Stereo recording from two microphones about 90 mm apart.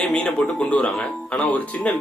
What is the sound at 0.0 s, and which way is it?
Speech, 10° left (ahead or behind).